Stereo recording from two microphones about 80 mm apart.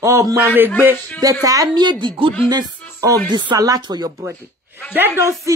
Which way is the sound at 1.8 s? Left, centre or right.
Right.